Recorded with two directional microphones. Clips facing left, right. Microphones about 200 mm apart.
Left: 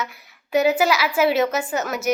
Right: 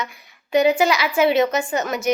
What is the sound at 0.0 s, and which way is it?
A woman's voice, 5° left (ahead or behind).